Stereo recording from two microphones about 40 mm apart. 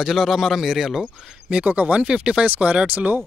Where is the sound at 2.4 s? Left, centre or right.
Right.